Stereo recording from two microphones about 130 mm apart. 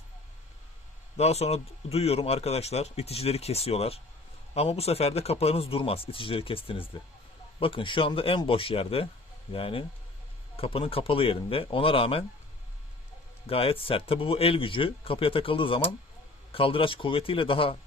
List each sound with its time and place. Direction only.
1.1 s speech: 55° left (ahead or behind)
13.5 s speech: 45° left (ahead or behind)